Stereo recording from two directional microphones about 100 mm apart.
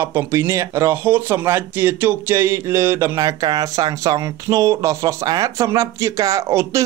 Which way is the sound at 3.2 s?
40° right (ahead or behind).